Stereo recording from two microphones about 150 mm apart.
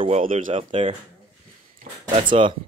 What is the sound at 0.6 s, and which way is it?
Speech, 35° right (ahead or behind).